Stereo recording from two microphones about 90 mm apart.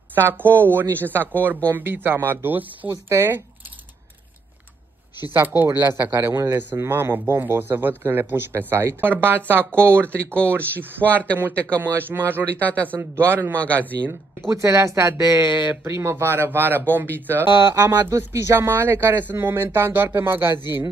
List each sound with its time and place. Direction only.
0.1 s speech: 20° right (ahead or behind)
0.8 s speech: 20° left (ahead or behind)
1.1 s speech: 25° right (ahead or behind)
5.3 s speech: 20° right (ahead or behind)
10.0 s speech: 15° left (ahead or behind)
10.4 s speech: 25° right (ahead or behind)
11.8 s speech: 25° right (ahead or behind)
12.5 s speech: 15° left (ahead or behind)
13.3 s speech: 25° right (ahead or behind)
13.6 s speech: 15° left (ahead or behind)
14.5 s speech: 30° right (ahead or behind)